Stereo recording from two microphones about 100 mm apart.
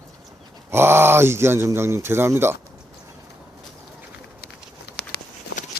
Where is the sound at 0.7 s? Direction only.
25° right (ahead or behind).